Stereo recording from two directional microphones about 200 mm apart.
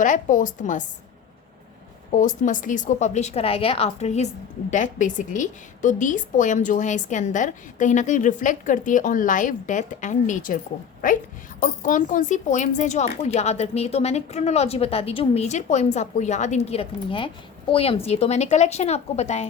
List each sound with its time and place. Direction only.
0.0 s speech: 40° left (ahead or behind)
2.1 s speech: 40° left (ahead or behind)